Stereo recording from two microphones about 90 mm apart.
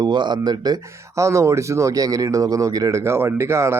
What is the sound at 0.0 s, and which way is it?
Speech, 60° right (ahead or behind).